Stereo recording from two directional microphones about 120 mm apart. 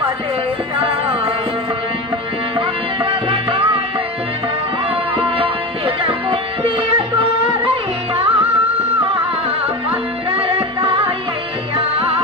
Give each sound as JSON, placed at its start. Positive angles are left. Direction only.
{"t": 0.8, "sound": "music", "side_deg": -50}
{"t": 2.6, "sound": "music", "side_deg": -45}
{"t": 5.1, "sound": "music", "side_deg": -50}
{"t": 10.3, "sound": "music", "side_deg": -50}